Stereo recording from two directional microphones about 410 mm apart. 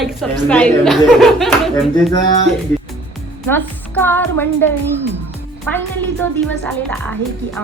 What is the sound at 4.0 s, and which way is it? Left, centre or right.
Speech, centre.